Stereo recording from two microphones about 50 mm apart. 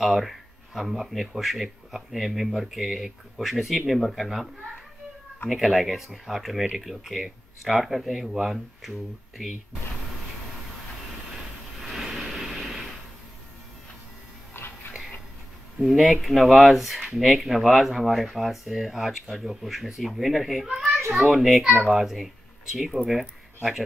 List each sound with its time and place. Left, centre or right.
0.0 s speech: centre
5.5 s speech: centre
11.8 s vehicle: centre
14.5 s a sound: left
15.8 s speech: centre
20.6 s children playing: centre
21.1 s a child's voice: centre